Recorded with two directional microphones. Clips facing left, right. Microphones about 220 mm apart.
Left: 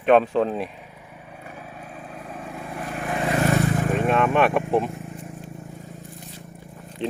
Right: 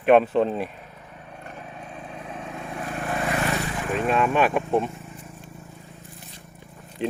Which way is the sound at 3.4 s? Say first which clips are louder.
Left 6 dB; 50° left (ahead or behind).